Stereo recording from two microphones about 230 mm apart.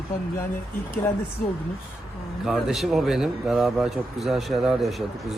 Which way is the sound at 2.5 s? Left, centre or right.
Centre.